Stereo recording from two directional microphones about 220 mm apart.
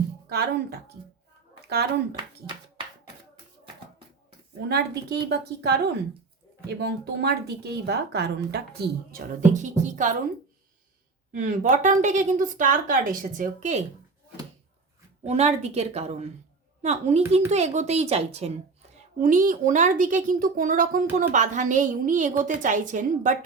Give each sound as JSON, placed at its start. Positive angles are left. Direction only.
{"t": 0.3, "sound": "a woman's voice", "side_deg": -45}
{"t": 4.7, "sound": "a woman's voice", "side_deg": -50}
{"t": 9.4, "sound": "a woman's voice", "side_deg": -35}
{"t": 11.3, "sound": "a woman's voice", "side_deg": -35}
{"t": 15.2, "sound": "a woman's voice", "side_deg": -30}